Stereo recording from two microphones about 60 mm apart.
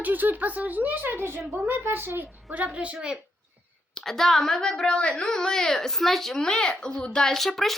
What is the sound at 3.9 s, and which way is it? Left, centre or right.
Speech, centre.